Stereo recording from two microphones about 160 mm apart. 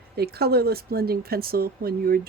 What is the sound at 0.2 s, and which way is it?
A woman's voice, 85° right.